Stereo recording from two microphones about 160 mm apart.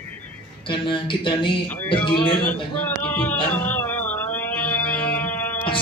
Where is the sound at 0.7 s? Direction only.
30° left (ahead or behind).